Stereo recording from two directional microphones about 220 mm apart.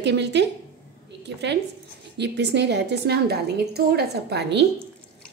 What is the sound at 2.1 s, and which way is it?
A woman's voice, 50° right (ahead or behind).